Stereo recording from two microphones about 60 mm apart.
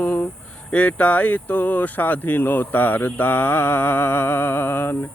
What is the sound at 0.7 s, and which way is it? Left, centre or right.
Speech, left.